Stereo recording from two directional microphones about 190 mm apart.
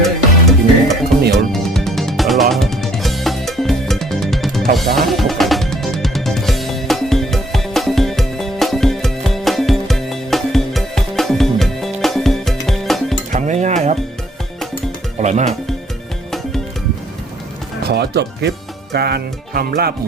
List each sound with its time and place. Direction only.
0.0 s music: centre (ahead or behind)
13.3 s stir: 40° right (ahead or behind)
15.2 s music: 40° right (ahead or behind)
17.8 s music: 60° right (ahead or behind)
18.9 s speech: 55° right (ahead or behind)